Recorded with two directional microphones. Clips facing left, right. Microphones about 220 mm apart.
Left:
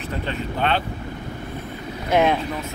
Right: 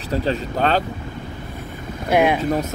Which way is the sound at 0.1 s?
35° right (ahead or behind).